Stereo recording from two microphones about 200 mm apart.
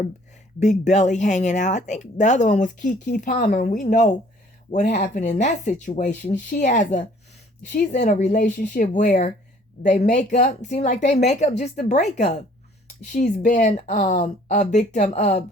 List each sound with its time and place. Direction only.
0.6 s speech: 35° left (ahead or behind)